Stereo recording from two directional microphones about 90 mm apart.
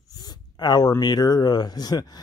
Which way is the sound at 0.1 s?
50° left (ahead or behind).